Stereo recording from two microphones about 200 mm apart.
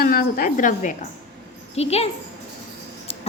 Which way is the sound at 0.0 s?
45° left (ahead or behind).